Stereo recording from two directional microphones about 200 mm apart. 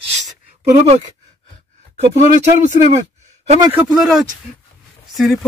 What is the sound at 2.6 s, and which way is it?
Speech, 35° right (ahead or behind).